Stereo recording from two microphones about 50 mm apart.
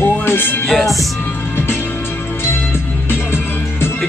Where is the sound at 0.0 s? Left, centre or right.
Left.